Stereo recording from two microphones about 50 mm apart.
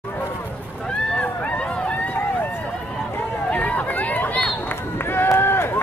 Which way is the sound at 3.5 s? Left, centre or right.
Left.